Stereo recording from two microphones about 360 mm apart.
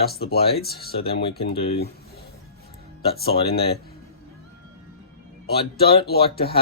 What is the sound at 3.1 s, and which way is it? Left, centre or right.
Speech, left.